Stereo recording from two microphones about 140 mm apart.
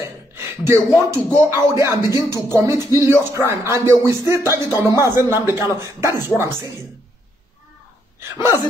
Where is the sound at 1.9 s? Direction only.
30° left (ahead or behind).